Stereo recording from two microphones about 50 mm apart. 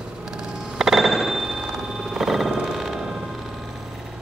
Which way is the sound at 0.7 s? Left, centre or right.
Centre.